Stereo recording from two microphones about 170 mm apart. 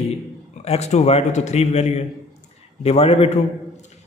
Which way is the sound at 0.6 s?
40° left (ahead or behind).